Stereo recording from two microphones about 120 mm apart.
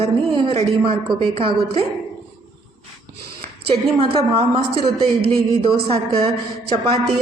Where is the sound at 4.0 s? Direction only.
50° right (ahead or behind).